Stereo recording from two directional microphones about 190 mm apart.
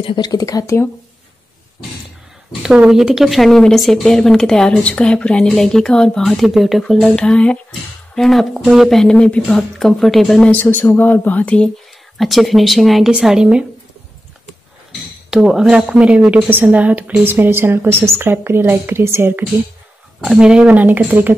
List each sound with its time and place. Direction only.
0.0 s speech: 25° left (ahead or behind)
2.6 s speech: 5° right (ahead or behind)
15.3 s a woman's voice: 5° right (ahead or behind)